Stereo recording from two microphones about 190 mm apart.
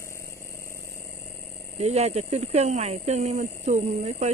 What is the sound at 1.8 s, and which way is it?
Speech, 35° right (ahead or behind).